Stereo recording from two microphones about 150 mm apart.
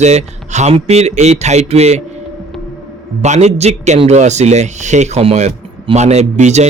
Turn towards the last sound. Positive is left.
turn(degrees=-50)  # may be behind; listen again after turning